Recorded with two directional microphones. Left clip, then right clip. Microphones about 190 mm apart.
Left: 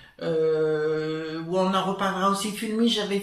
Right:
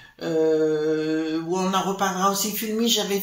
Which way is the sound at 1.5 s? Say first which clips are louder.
Left 2 dB; 45° right (ahead or behind).